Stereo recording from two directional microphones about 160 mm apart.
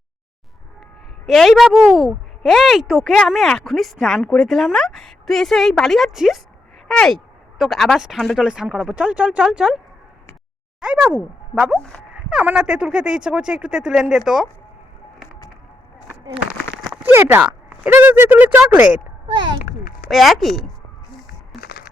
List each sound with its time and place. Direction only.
1.3 s speech: centre (ahead or behind)
17.1 s speech: 15° right (ahead or behind)
19.3 s a child's voice: 30° right (ahead or behind)
20.1 s speech: centre (ahead or behind)
21.6 s a sound: 90° left